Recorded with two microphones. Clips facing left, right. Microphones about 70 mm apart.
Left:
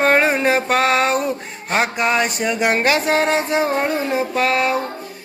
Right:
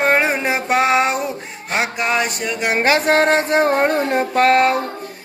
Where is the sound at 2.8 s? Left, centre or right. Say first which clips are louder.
Right 2 dB; right.